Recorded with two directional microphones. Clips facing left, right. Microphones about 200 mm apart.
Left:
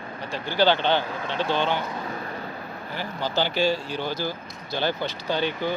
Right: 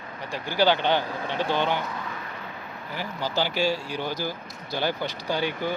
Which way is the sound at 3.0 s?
10° right (ahead or behind).